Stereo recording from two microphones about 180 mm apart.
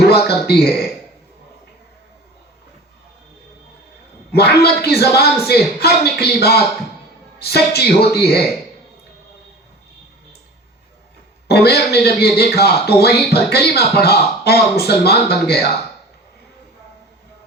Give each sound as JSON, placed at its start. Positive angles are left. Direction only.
{"t": 0.1, "sound": "speech", "side_deg": 60}
{"t": 4.3, "sound": "speech", "side_deg": 65}
{"t": 11.4, "sound": "speech", "side_deg": 60}